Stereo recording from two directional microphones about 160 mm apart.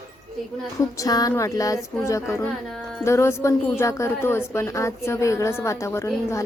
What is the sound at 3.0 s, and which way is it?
A woman's voice, 15° left (ahead or behind).